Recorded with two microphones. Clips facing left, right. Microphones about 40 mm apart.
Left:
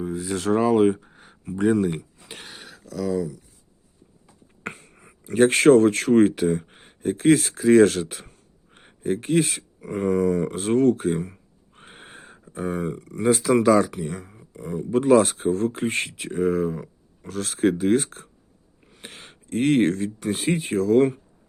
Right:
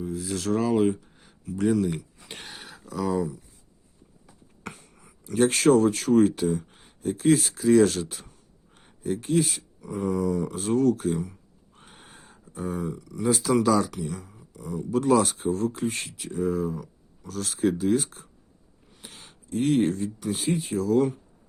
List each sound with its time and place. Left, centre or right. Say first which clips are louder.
0.0 s speech: left 4 dB; left
2.2 s a sound: even; centre
3.1 s speech: left 1 dB; right
4.6 s speech: left 5 dB; left